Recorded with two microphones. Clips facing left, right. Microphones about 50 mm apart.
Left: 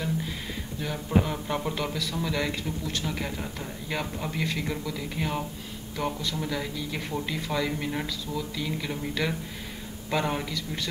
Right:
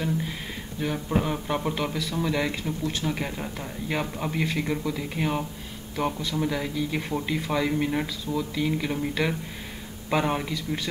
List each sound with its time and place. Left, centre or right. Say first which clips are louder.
0.0 s speech: right 2 dB; centre